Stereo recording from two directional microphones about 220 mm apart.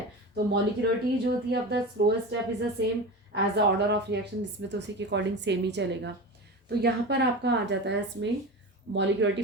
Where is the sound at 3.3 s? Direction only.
50° right (ahead or behind).